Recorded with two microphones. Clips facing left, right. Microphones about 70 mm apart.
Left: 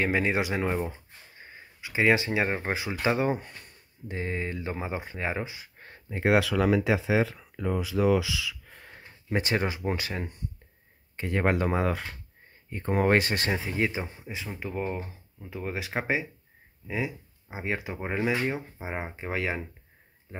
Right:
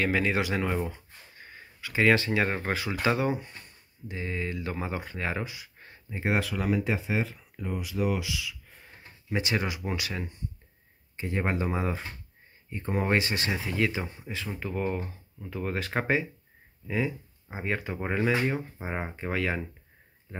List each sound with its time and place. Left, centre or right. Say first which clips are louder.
0.0 s speech: left 1 dB; left
3.3 s speech: left 1 dB; left
6.1 s speech: left 5 dB; left
8.0 s speech: left 4 dB; left
9.3 s speech: left 2 dB; left
11.1 s speech: left 3 dB; left
13.7 s speech: even; left
14.5 s speech: right 1 dB; centre